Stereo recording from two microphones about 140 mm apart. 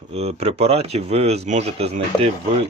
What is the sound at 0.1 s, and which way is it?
Speech, 50° right (ahead or behind).